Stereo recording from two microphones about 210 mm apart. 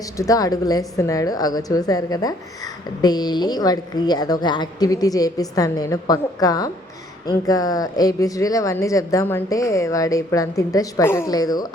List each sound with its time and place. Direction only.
0.0 s speech: 15° left (ahead or behind)